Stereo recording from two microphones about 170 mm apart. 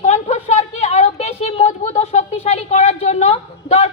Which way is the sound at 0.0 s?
40° left (ahead or behind).